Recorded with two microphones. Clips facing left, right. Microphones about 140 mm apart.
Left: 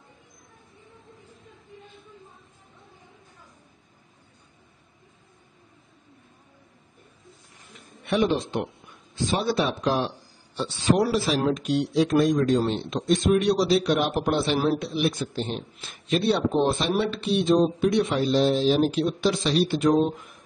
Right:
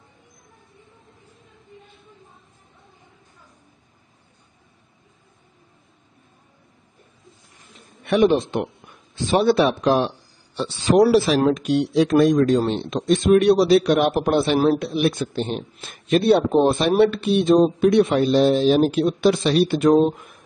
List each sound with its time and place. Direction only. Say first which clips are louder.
8.1 s a man's voice: right 6 dB; 65° right (ahead or behind)
10.5 s a man's voice: right 5 dB; 90° right; by 20.0 s 60° right (ahead or behind)